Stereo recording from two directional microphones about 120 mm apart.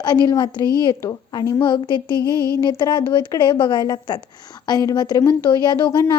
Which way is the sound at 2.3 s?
30° right (ahead or behind).